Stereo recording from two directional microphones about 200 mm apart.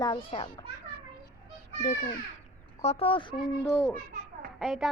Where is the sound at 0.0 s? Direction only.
25° left (ahead or behind).